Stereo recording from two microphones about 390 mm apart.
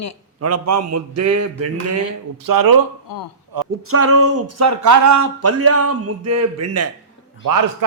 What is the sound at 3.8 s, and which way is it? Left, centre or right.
Speech, right.